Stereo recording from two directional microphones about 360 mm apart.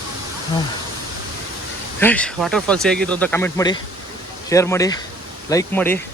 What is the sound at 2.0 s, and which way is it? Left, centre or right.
Speech, centre.